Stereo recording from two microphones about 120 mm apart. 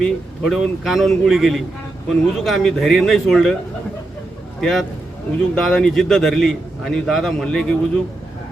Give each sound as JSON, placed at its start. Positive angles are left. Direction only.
{"t": 0.0, "sound": "a man's voice", "side_deg": 0}
{"t": 4.6, "sound": "a man's voice", "side_deg": 0}